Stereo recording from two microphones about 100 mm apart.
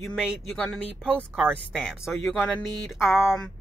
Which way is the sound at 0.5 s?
10° left (ahead or behind).